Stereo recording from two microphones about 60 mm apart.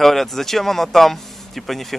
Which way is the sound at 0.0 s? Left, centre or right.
Centre.